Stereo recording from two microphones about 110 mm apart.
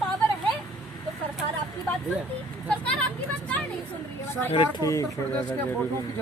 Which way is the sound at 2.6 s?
10° left (ahead or behind).